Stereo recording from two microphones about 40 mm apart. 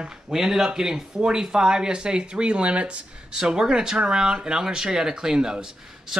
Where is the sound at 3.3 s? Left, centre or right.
Centre.